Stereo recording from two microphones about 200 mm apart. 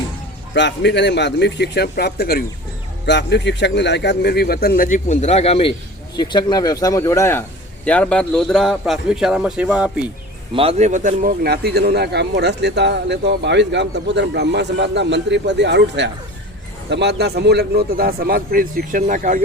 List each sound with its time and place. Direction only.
0.5 s a man's voice: 60° left (ahead or behind); by 10.1 s 5° right (ahead or behind)
10.5 s a man's voice: 30° right (ahead or behind)